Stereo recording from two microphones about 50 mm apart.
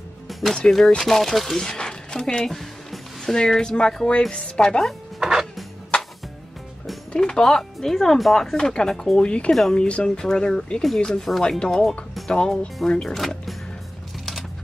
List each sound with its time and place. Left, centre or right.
0.3 s music: centre
0.7 s speech: centre
4.6 s speech: centre
5.2 s music: centre
7.1 s speech: centre
8.5 s speech: centre
9.5 s speech: centre